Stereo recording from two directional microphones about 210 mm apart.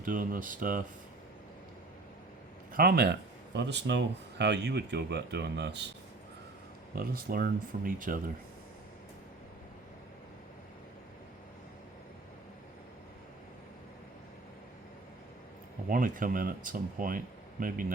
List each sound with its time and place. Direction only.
0.0 s speech: 40° right (ahead or behind)
2.7 s speech: 50° right (ahead or behind)
6.9 s speech: 45° right (ahead or behind)
15.9 s speech: 40° right (ahead or behind)